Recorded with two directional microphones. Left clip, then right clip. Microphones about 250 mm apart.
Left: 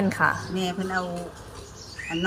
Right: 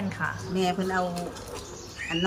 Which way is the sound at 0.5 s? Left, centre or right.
Centre.